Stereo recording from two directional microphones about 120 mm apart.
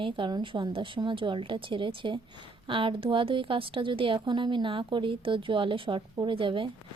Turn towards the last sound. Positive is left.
turn(degrees=-45)  # may be behind; listen again after turning